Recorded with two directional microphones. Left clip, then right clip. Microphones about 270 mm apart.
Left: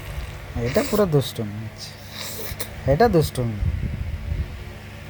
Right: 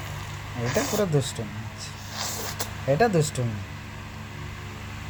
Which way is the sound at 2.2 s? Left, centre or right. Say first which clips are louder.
Right 2 dB; right.